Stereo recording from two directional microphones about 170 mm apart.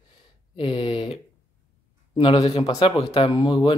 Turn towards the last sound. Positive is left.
turn(degrees=25)  # may be behind; listen again after turning